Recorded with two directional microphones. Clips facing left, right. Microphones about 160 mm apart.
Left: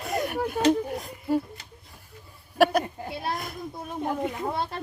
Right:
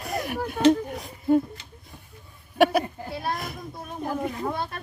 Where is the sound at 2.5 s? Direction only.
Centre (ahead or behind).